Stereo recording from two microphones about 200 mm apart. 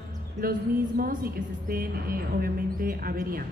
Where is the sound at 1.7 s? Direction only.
50° right (ahead or behind).